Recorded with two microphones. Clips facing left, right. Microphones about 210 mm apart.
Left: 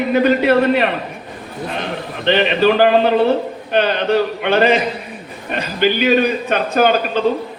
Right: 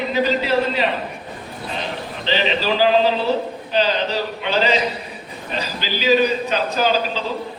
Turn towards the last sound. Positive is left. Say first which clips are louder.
# left 5 dB
turn(degrees=60)  # may be behind; listen again after turning